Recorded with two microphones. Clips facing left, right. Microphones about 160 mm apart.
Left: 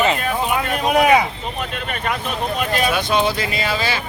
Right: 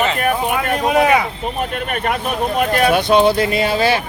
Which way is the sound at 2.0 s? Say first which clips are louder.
Right 3 dB; 50° right (ahead or behind).